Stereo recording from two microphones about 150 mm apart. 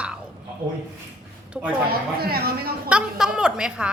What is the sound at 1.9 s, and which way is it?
Speech, 90° right.